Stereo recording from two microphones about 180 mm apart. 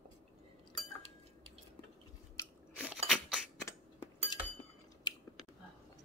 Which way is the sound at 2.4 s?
10° left (ahead or behind).